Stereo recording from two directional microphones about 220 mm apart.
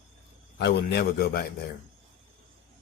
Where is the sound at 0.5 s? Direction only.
45° left (ahead or behind).